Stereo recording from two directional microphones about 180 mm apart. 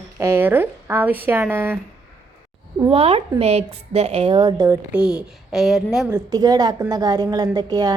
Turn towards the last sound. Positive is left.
turn(degrees=-20)  # may be behind; listen again after turning